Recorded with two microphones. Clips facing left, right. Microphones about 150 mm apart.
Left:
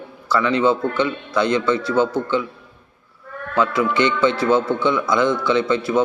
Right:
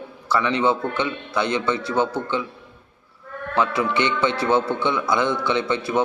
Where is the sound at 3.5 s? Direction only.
25° right (ahead or behind).